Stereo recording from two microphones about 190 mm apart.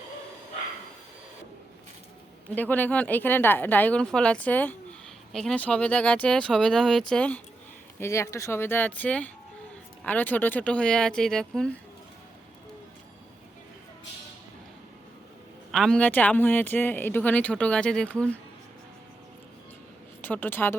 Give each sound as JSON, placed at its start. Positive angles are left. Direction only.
{"t": 2.6, "sound": "speech", "side_deg": 10}
{"t": 15.7, "sound": "speech", "side_deg": 5}
{"t": 20.2, "sound": "speech", "side_deg": 10}